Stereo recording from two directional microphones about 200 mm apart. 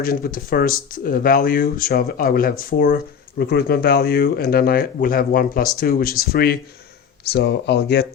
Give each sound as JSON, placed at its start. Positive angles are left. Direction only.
{"t": 0.0, "sound": "speech", "side_deg": 45}